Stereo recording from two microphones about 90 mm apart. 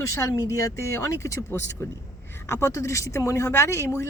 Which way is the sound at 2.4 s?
35° left (ahead or behind).